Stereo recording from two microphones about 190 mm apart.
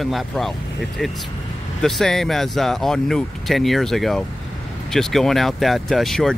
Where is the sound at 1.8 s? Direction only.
Centre (ahead or behind).